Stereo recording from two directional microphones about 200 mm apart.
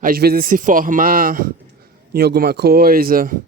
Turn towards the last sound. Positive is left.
turn(degrees=-45)  # may be behind; listen again after turning